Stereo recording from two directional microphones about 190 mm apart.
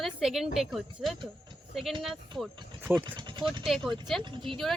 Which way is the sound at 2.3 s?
25° right (ahead or behind).